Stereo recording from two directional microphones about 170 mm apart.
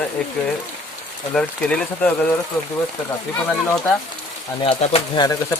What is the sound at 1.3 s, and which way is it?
Speech, 5° left (ahead or behind).